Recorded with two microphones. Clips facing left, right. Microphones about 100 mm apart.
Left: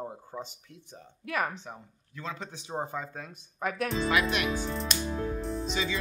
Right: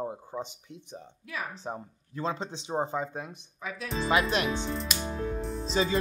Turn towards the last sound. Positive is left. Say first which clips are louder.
# right 4 dB
turn(degrees=-35)  # may be behind; listen again after turning